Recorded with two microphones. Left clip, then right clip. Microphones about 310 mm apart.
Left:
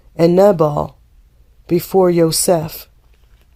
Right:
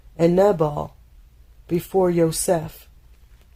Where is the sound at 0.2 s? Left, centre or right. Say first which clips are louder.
Left 6 dB; left.